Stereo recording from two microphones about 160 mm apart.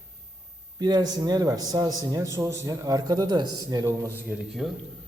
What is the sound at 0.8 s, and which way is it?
A man's voice, 25° right (ahead or behind).